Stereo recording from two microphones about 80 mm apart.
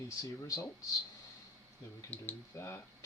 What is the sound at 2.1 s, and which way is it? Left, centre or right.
Speech, left.